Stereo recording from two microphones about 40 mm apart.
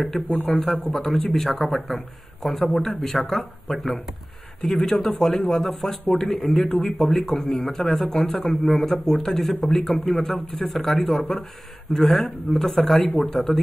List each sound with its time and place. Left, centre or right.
0.1 s speech: centre
0.9 s speech: centre
1.3 s speech: centre